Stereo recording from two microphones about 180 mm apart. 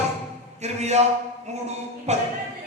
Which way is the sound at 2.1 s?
40° right (ahead or behind).